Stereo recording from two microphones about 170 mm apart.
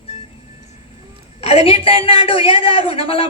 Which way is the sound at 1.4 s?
35° left (ahead or behind).